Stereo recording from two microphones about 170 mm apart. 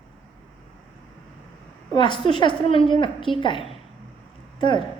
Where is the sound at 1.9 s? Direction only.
30° left (ahead or behind).